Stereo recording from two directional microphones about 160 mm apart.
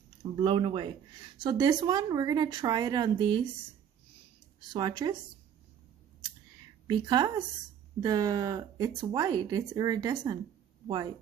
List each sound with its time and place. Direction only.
0.2 s speech: 30° right (ahead or behind)
4.6 s speech: 25° right (ahead or behind)
6.9 s speech: 30° right (ahead or behind)